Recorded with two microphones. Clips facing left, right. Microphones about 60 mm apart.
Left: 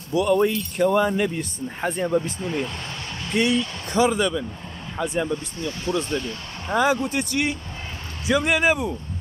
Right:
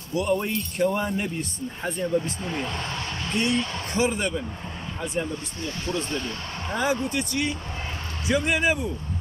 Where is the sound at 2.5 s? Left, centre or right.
Centre.